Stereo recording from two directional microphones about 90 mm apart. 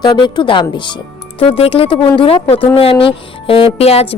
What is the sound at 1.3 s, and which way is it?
Speech, 90° left.